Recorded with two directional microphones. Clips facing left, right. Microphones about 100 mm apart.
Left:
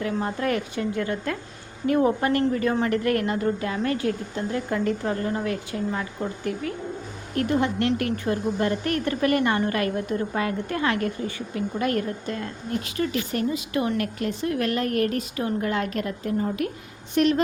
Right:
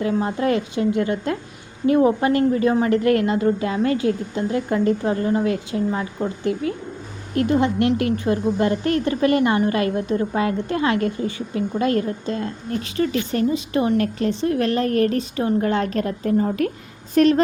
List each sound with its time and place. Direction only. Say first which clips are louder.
0.0 s a woman's voice: right 5 dB; 20° right (ahead or behind); by 17.4 s 35° right (ahead or behind)